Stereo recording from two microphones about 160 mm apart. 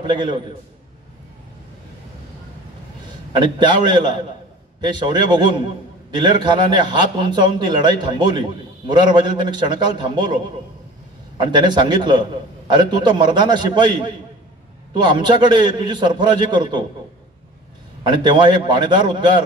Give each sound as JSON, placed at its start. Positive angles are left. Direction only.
{"t": 0.0, "sound": "a man's voice", "side_deg": -30}
{"t": 3.3, "sound": "a man's voice", "side_deg": -30}
{"t": 18.0, "sound": "a man's voice", "side_deg": -30}